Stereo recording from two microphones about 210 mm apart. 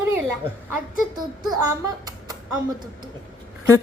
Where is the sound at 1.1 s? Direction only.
20° right (ahead or behind).